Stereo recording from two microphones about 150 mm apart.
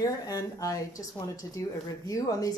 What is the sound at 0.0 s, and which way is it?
Speech, 25° left (ahead or behind).